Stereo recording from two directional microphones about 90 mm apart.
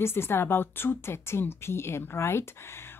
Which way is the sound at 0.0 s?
25° left (ahead or behind).